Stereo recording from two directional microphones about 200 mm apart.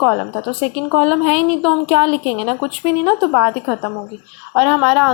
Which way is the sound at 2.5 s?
5° left (ahead or behind).